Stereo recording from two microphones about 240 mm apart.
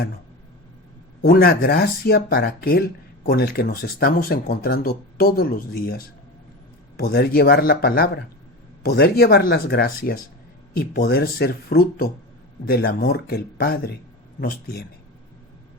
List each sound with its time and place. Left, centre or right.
1.2 s speech: left
7.0 s speech: left